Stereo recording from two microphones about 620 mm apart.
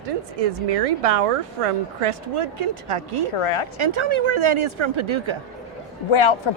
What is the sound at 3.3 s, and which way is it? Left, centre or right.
Speech, left.